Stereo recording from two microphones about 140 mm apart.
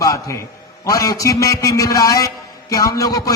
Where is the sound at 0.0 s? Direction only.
20° left (ahead or behind).